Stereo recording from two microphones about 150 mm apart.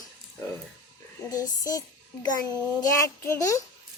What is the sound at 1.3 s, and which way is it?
Child singing, 25° left (ahead or behind).